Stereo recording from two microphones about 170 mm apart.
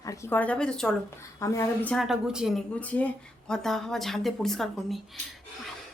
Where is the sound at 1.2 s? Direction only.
20° left (ahead or behind).